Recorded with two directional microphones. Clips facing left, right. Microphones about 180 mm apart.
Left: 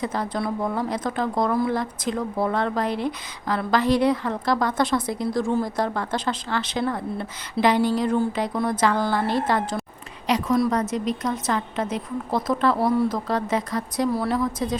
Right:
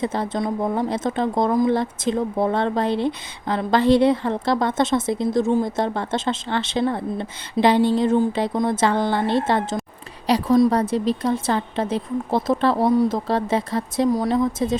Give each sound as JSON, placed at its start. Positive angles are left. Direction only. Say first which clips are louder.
{"t": 0.0, "sound": "a woman's voice", "louder": "right 3 dB", "side_deg": -25}